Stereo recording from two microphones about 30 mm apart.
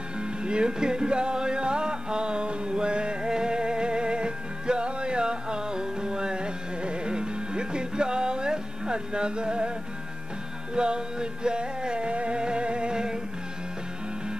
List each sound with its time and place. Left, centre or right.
0.2 s music: right
10.7 s music: right